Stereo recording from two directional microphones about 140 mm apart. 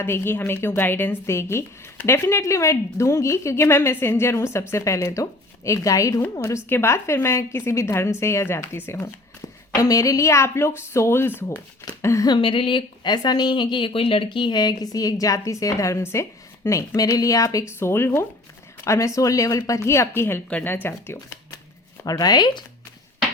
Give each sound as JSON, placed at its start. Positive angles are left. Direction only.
{"t": 0.0, "sound": "a woman's voice", "side_deg": 15}
{"t": 22.0, "sound": "a woman's voice", "side_deg": 25}